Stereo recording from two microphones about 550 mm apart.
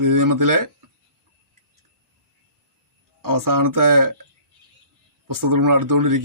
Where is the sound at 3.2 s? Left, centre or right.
Right.